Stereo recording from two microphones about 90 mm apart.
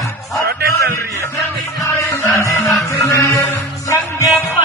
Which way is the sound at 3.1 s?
35° left (ahead or behind).